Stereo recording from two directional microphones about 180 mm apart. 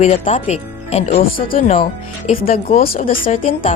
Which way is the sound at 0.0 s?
40° left (ahead or behind).